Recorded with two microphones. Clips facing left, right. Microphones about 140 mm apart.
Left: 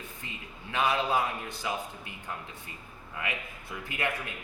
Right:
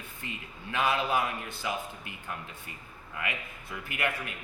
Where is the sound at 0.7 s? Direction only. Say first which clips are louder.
Left 1 dB; 20° left (ahead or behind).